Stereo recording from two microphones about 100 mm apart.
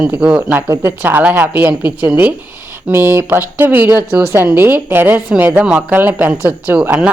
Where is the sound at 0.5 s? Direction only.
25° right (ahead or behind).